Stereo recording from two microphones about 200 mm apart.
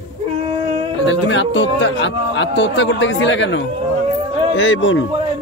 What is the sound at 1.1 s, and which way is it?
A man's voice, 65° left (ahead or behind).